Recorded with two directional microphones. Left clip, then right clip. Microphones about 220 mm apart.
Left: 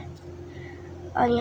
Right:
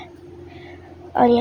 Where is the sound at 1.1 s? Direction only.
25° right (ahead or behind).